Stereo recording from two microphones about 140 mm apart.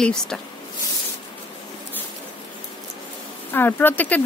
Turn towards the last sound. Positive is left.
turn(degrees=10)  # may be behind; listen again after turning